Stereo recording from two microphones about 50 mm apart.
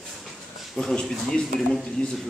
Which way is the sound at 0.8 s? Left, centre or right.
Centre.